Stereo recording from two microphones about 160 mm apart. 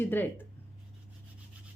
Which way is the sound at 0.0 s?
15° left (ahead or behind).